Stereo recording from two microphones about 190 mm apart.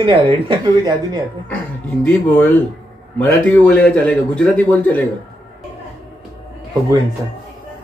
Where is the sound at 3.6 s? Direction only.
5° left (ahead or behind).